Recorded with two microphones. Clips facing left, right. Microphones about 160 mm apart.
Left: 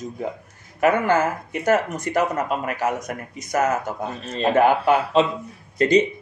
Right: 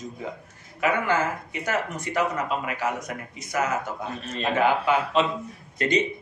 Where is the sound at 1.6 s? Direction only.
45° left (ahead or behind).